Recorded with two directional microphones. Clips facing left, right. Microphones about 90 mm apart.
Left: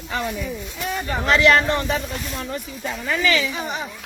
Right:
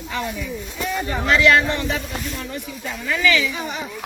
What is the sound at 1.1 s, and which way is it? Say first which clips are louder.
Speech: even; 35° left (ahead or behind).